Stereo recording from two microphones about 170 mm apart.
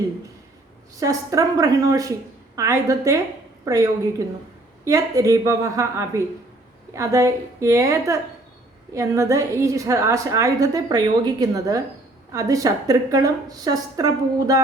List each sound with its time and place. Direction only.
0.9 s a woman's voice: 20° right (ahead or behind)
4.9 s a woman's voice: 20° right (ahead or behind)